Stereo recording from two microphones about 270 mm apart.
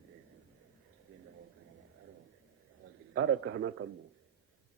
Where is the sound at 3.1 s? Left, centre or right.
Right.